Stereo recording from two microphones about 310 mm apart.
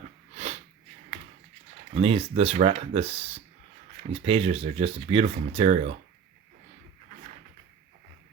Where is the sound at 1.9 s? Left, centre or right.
Centre.